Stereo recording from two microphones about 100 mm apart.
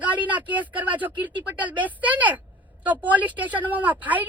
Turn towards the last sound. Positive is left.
turn(degrees=-15)  # may be behind; listen again after turning